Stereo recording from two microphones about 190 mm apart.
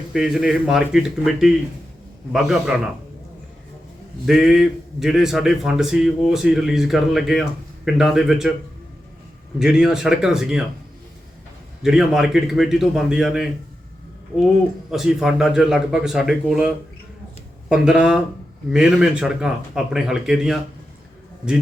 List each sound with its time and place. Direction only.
0.1 s a man's voice: 5° right (ahead or behind)
4.3 s a man's voice: centre (ahead or behind)
9.6 s a man's voice: 5° right (ahead or behind)
11.8 s a man's voice: centre (ahead or behind)
14.8 s a man's voice: 5° right (ahead or behind)